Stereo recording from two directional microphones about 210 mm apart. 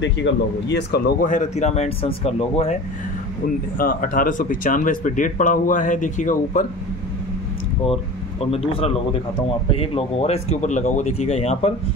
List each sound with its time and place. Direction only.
0.0 s speech: 55° left (ahead or behind); by 2.7 s 30° left (ahead or behind)
3.7 s speech: 40° left (ahead or behind)
8.5 s speech: 30° left (ahead or behind)